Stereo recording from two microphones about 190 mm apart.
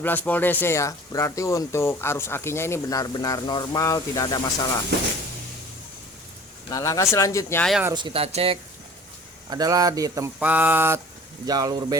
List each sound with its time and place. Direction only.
0.0 s speech: 10° left (ahead or behind)
6.7 s speech: 20° left (ahead or behind)
7.6 s speech: centre (ahead or behind)
7.9 s speech: 25° right (ahead or behind)
9.5 s speech: 20° right (ahead or behind)